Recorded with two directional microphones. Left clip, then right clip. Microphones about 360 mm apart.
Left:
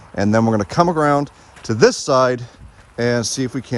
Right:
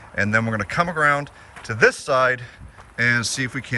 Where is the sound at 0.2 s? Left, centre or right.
Centre.